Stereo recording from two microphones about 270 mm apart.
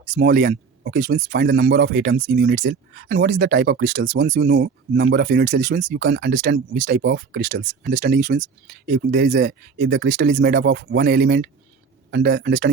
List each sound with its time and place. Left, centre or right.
0.0 s speech: right